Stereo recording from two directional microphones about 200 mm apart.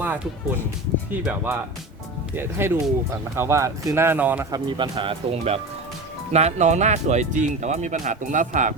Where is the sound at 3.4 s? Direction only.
15° right (ahead or behind).